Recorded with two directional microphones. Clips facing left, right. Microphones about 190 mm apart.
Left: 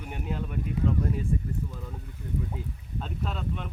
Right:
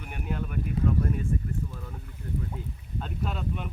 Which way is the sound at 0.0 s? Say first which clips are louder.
Even; 25° left (ahead or behind).